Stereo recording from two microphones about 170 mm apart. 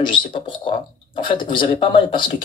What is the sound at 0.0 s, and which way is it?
Speech, 30° left (ahead or behind).